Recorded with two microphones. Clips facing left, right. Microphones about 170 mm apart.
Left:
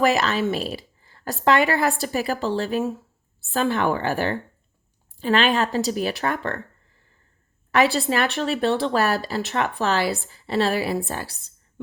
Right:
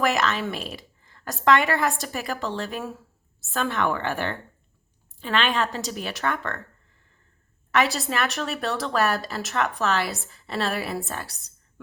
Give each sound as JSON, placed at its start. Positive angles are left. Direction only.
{"t": 0.0, "sound": "a woman's voice", "side_deg": 35}
{"t": 7.7, "sound": "a woman's voice", "side_deg": 35}